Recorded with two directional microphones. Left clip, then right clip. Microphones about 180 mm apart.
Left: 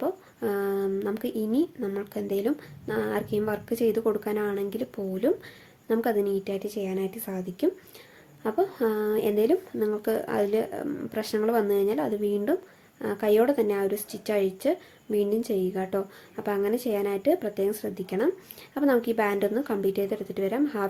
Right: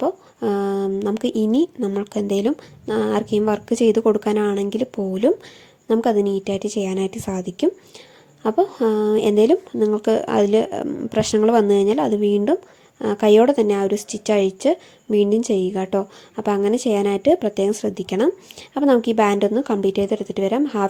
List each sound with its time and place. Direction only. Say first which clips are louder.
0.0 s speech: right 7 dB; 30° right (ahead or behind)